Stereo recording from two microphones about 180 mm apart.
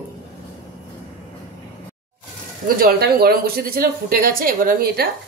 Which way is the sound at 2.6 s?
60° right (ahead or behind).